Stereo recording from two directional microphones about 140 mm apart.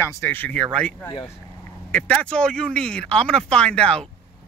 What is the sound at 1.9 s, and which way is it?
A man's voice, 10° left (ahead or behind).